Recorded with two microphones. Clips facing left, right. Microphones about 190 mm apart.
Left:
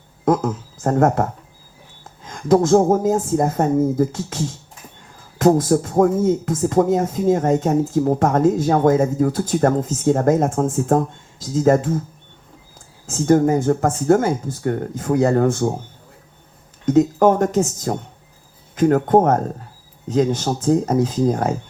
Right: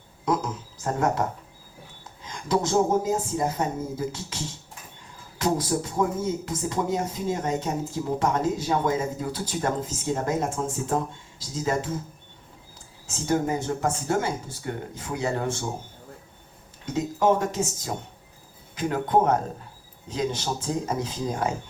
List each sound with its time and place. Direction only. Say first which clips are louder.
0.3 s speech: left 8 dB; 50° left (ahead or behind)
13.1 s speech: left 10 dB; 50° left (ahead or behind)
16.8 s speech: left 9 dB; 45° left (ahead or behind)